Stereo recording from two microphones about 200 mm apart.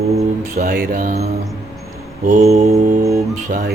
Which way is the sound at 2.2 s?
35° right (ahead or behind).